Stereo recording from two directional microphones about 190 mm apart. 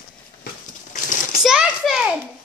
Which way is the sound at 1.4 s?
5° right (ahead or behind).